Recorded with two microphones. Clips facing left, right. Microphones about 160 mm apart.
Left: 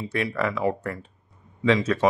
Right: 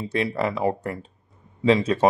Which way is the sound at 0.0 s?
30° right (ahead or behind).